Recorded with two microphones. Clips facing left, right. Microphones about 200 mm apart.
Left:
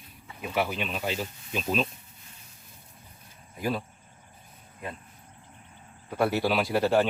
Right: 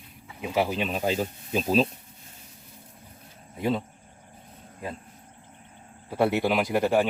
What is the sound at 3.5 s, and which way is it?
Speech, 25° right (ahead or behind).